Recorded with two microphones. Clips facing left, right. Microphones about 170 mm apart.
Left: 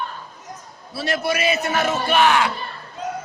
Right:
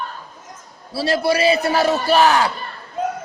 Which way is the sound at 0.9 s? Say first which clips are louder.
Right 5 dB; 30° right (ahead or behind).